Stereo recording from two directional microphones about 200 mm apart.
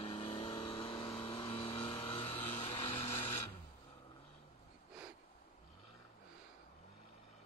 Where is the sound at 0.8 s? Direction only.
Centre (ahead or behind).